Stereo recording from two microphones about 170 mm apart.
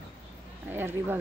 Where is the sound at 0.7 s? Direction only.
10° right (ahead or behind).